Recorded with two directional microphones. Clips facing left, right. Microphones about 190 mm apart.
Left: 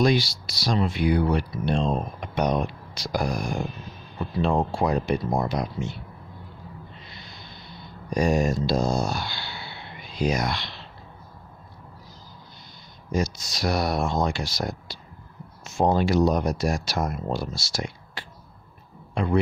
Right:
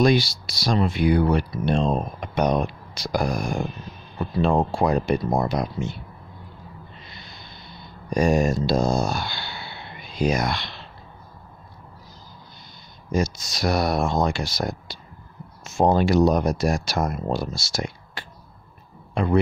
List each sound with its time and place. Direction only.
0.0 s speech: 50° right (ahead or behind)
8.1 s speech: 50° right (ahead or behind)
13.1 s speech: 50° right (ahead or behind)
14.9 s a sound: 50° right (ahead or behind)
15.6 s a man's voice: 45° right (ahead or behind)